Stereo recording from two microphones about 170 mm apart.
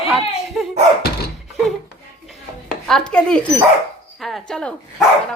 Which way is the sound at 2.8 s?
5° left (ahead or behind).